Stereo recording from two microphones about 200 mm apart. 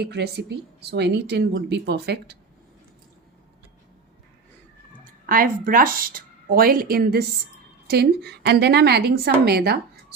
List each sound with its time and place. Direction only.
0.0 s speech: 55° right (ahead or behind)
5.2 s speech: 45° right (ahead or behind)